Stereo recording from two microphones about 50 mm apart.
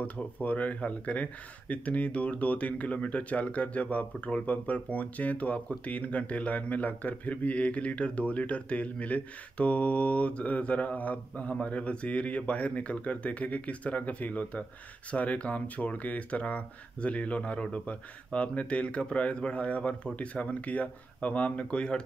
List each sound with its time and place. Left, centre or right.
0.0 s speech: left